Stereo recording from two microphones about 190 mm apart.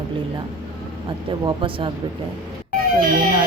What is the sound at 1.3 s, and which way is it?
Speech, 25° right (ahead or behind).